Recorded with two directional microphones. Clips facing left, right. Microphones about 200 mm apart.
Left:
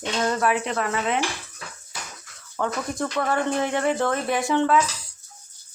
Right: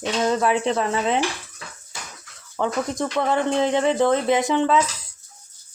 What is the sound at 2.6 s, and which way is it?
Speech, 15° right (ahead or behind).